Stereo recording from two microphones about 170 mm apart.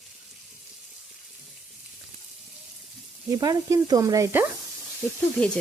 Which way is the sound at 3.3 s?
20° right (ahead or behind).